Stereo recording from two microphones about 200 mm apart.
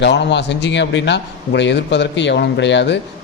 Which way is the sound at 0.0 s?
60° left (ahead or behind).